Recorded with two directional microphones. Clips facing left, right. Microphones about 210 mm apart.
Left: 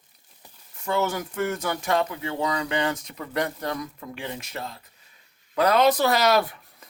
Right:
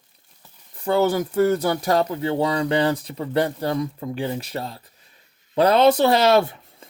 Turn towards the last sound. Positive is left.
turn(degrees=-25)  # may be behind; listen again after turning